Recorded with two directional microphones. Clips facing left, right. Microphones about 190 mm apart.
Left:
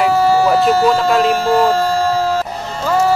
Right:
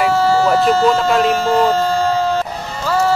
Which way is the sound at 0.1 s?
15° left (ahead or behind).